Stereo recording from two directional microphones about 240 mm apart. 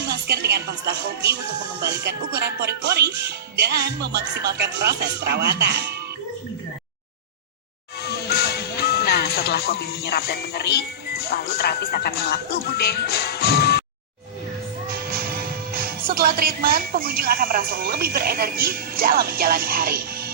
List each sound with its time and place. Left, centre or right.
0.0 s speech: right
8.0 s music: left
15.7 s a woman's voice: right